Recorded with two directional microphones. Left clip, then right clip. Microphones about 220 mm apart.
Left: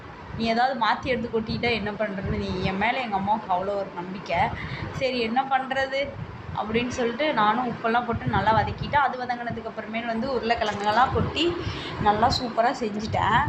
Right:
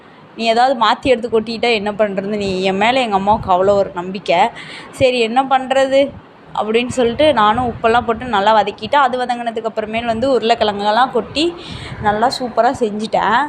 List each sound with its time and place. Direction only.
0.3 s a woman's voice: 40° right (ahead or behind)